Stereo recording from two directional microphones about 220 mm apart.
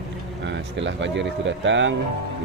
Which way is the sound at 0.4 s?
55° right (ahead or behind).